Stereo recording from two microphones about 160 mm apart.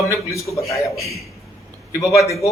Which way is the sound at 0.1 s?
20° left (ahead or behind).